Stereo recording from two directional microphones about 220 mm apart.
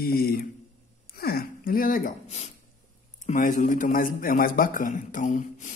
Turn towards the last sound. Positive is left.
turn(degrees=35)  # may be behind; listen again after turning